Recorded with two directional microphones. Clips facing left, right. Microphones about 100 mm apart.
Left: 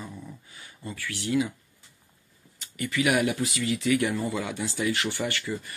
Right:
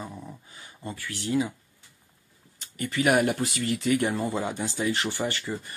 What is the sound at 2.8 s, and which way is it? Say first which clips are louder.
Speech: right 2 dB; 40° right (ahead or behind).